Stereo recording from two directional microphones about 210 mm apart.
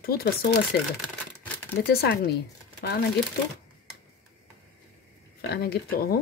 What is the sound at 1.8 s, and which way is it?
Speech, 50° left (ahead or behind).